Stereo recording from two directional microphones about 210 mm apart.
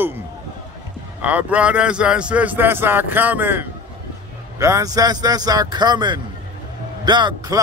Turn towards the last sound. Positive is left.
turn(degrees=-20)  # may be behind; listen again after turning